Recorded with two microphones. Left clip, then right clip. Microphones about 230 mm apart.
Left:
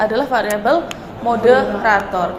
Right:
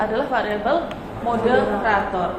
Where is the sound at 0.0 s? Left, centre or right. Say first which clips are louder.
Left 5 dB; left.